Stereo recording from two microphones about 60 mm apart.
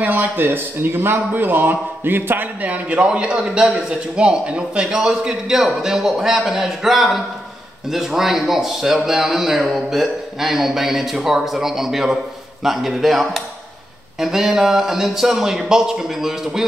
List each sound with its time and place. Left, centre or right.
0.0 s a man's voice: right
3.0 s a man's voice: centre
4.7 s a man's voice: centre